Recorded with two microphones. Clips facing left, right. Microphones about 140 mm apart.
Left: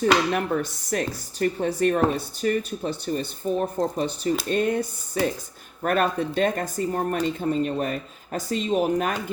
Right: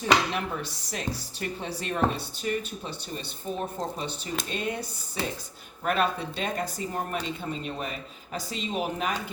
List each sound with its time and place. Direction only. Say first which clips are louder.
0.0 s speech: left 4 dB; 50° left (ahead or behind)